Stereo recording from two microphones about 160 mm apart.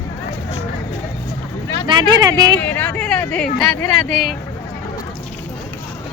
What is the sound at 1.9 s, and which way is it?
Speech, 25° right (ahead or behind).